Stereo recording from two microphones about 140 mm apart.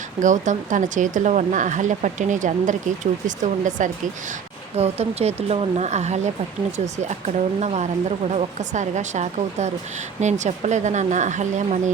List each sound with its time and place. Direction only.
0.2 s speech: 65° right (ahead or behind)
4.8 s speech: 45° right (ahead or behind)